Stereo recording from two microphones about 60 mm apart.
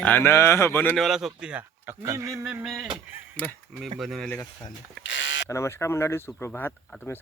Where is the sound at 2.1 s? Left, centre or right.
Right.